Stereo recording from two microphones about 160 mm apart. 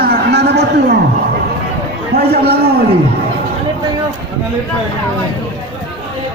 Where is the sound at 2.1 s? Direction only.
75° right (ahead or behind).